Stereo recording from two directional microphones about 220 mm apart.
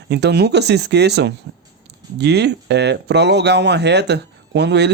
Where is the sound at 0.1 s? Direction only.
50° right (ahead or behind).